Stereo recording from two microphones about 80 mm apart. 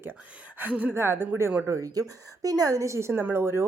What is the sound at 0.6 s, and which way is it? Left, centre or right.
Speech, right.